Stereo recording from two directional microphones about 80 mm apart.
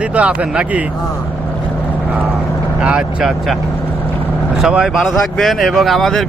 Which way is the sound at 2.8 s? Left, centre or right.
Centre.